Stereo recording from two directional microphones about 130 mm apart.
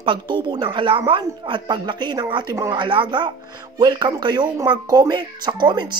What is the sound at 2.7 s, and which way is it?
Speech, 40° right (ahead or behind).